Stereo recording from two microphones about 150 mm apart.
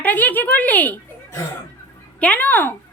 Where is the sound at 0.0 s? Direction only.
10° left (ahead or behind).